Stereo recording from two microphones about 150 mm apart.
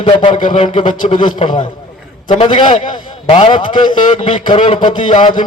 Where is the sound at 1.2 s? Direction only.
30° left (ahead or behind).